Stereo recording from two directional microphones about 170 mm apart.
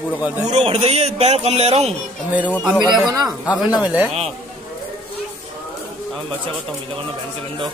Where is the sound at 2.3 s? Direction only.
10° right (ahead or behind).